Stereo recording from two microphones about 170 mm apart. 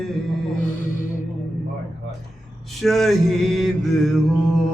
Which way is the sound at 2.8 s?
Centre (ahead or behind).